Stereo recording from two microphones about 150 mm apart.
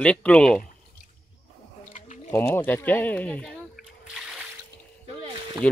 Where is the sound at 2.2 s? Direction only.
15° left (ahead or behind).